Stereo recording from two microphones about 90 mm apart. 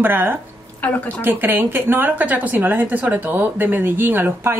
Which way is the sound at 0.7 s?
15° left (ahead or behind).